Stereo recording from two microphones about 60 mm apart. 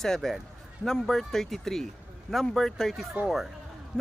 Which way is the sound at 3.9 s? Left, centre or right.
Centre.